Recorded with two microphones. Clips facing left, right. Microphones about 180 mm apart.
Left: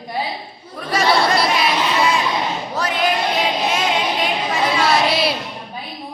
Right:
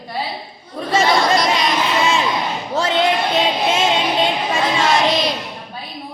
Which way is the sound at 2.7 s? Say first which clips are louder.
Right 4 dB; 25° right (ahead or behind).